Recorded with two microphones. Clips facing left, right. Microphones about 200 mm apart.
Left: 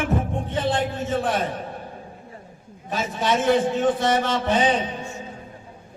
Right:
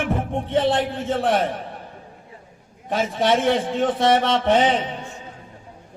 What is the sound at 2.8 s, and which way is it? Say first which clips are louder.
Speech: right 4 dB; 60° right (ahead or behind).